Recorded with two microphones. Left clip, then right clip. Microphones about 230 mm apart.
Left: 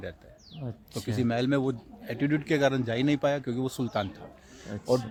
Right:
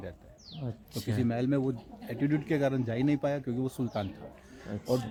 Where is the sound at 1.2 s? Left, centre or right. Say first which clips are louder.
Left 3 dB; left.